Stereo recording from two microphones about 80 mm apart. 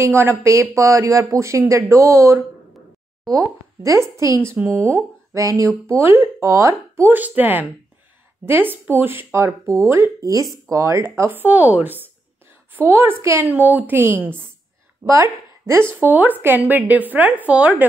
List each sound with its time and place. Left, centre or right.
0.0 s speech: right
0.5 s speech: right
5.9 s speech: right
7.1 s speech: right
15.0 s speech: right
15.9 s speech: right